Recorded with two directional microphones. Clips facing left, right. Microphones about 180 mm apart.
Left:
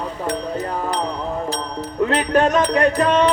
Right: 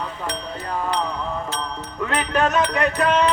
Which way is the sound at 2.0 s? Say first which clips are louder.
Left 4 dB; 35° left (ahead or behind).